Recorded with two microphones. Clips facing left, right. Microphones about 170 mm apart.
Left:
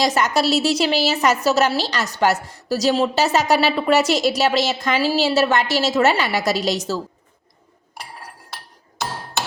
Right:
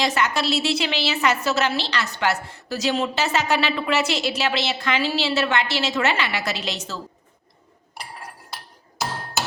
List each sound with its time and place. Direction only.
0.0 s a woman's voice: 40° left (ahead or behind)